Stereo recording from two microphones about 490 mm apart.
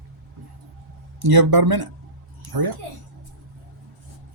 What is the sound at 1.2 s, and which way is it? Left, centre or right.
Speech, right.